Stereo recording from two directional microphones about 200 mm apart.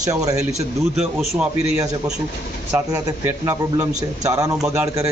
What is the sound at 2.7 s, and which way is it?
A man's voice, 10° right (ahead or behind).